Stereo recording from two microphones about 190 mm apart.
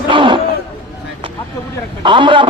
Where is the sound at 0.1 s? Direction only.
25° right (ahead or behind).